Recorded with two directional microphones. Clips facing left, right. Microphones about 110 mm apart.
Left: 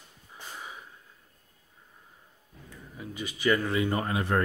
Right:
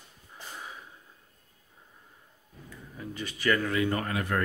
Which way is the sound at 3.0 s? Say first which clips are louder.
Even; 10° left (ahead or behind).